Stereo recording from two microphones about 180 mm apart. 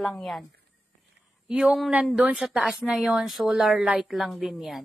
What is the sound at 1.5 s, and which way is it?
Speech, 5° right (ahead or behind).